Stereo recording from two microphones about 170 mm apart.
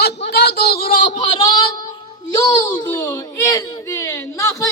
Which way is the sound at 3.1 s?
15° left (ahead or behind).